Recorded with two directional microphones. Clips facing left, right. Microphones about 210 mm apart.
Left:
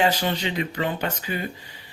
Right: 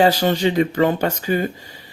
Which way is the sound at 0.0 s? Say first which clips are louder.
Right 7 dB; 40° right (ahead or behind).